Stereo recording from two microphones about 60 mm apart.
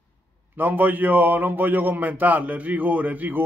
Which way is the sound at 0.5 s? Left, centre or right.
Right.